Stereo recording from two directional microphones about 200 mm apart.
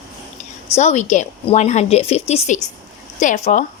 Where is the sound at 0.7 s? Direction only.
35° left (ahead or behind).